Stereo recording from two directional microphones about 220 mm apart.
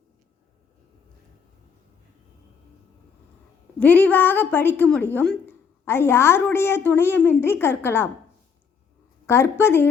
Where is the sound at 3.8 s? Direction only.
5° left (ahead or behind).